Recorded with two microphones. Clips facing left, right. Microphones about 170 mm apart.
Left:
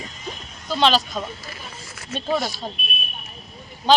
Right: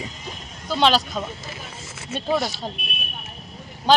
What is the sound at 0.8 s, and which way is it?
A man's voice, 10° right (ahead or behind).